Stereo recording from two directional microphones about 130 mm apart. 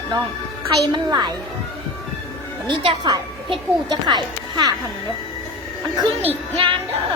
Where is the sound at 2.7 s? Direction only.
40° right (ahead or behind).